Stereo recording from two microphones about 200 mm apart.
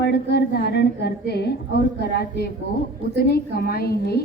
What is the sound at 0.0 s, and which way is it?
A woman's voice, 55° left (ahead or behind).